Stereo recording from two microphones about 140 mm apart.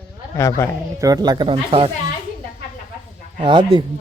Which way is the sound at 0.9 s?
25° right (ahead or behind).